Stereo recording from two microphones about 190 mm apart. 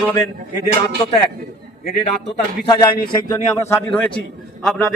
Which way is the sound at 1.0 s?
20° left (ahead or behind).